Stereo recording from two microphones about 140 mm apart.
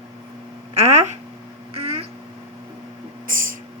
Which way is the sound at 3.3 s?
75° right (ahead or behind).